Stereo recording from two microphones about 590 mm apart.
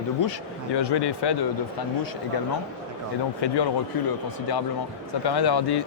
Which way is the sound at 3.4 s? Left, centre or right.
Left.